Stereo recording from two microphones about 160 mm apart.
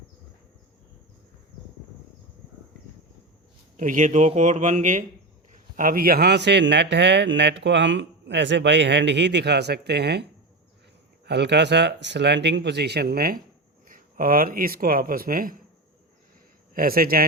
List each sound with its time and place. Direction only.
3.8 s a man's voice: 55° right (ahead or behind); by 10.2 s 90° right
11.3 s a man's voice: 90° right; by 15.5 s 65° right (ahead or behind)
16.7 s a man's voice: 65° right (ahead or behind)